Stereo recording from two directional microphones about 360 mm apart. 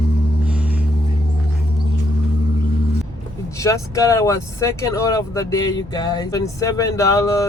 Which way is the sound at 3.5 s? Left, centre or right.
Centre.